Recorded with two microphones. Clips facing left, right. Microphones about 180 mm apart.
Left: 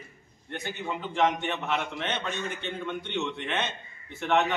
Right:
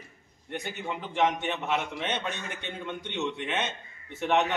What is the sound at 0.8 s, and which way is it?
A man's voice, 5° right (ahead or behind).